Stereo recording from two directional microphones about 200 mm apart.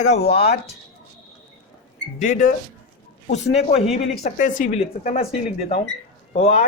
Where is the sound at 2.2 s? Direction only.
40° left (ahead or behind).